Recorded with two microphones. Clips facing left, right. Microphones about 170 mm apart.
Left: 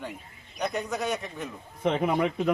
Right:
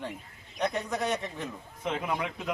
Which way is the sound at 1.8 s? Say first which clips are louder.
Left 7 dB; 60° left (ahead or behind).